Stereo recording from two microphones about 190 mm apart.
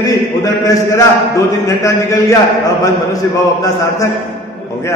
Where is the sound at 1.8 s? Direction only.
15° left (ahead or behind).